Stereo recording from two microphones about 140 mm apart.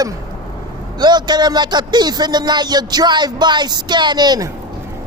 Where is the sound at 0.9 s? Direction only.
30° right (ahead or behind).